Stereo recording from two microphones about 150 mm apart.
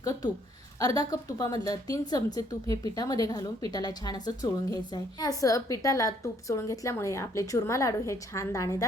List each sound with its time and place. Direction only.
0.0 s a woman's voice: 25° left (ahead or behind)